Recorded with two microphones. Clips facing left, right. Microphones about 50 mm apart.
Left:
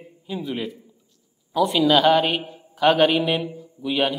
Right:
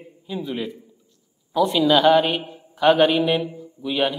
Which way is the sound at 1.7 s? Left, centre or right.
Centre.